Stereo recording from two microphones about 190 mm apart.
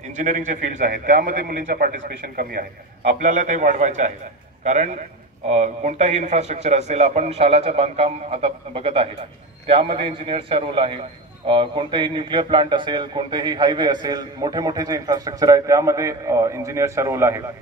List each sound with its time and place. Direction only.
0.1 s a man's voice: 40° right (ahead or behind)
1.5 s speech: 55° right (ahead or behind)
3.2 s a man's voice: 40° right (ahead or behind); by 17.4 s 15° right (ahead or behind)